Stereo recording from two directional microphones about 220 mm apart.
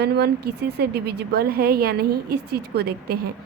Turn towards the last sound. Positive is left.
turn(degrees=-45)  # may be behind; listen again after turning